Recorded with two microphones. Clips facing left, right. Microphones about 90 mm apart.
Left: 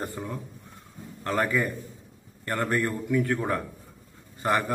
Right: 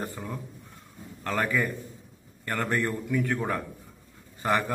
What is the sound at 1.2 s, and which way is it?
A man's voice, 10° left (ahead or behind).